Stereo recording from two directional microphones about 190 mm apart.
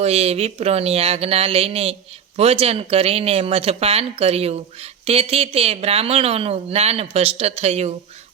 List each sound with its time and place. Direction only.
0.0 s speech: 35° right (ahead or behind)